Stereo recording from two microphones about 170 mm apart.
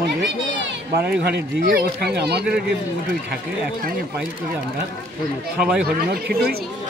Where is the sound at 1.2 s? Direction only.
65° right (ahead or behind).